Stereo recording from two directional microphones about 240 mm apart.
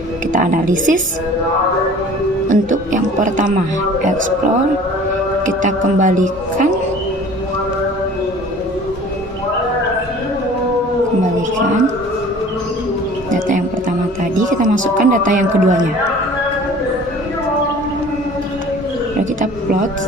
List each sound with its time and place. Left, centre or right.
0.3 s a woman's voice: right
2.5 s a woman's voice: right
5.6 s a woman's voice: right
13.3 s music: right
14.3 s speech: right